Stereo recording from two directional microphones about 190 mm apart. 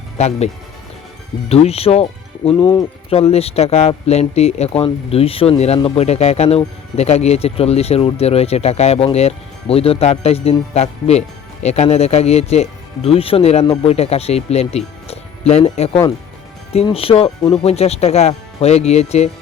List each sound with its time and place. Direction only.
0.2 s speech: 35° left (ahead or behind)